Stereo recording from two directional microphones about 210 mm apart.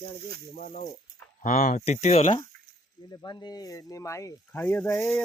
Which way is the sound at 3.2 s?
20° left (ahead or behind).